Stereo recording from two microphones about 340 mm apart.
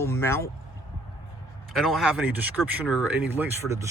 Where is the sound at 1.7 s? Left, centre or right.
Centre.